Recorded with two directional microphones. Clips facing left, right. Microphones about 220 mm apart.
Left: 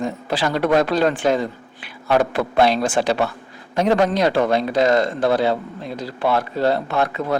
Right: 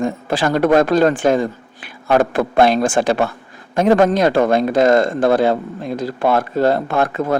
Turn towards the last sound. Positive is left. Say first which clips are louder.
# right 3 dB
turn(degrees=-50)  # may be behind; listen again after turning